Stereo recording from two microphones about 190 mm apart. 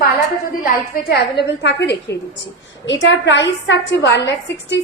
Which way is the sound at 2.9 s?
75° left (ahead or behind).